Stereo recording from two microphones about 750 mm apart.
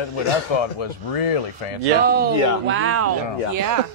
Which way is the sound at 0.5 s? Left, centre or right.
Left.